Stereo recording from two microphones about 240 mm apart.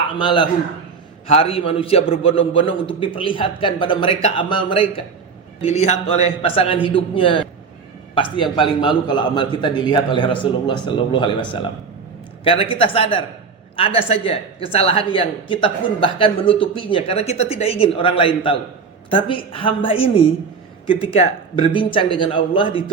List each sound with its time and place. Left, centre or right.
0.2 s speech: centre